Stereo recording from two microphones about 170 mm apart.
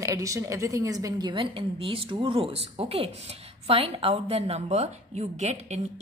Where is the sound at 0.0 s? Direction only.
20° right (ahead or behind).